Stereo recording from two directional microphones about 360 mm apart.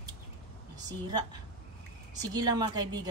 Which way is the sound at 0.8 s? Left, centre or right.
Centre.